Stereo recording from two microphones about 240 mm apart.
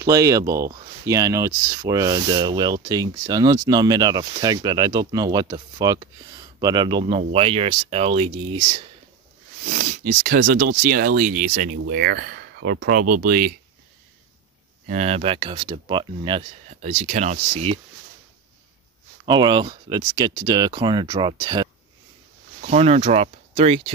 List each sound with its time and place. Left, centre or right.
0.0 s speech: centre
9.7 s speech: right
14.9 s speech: right
19.2 s speech: centre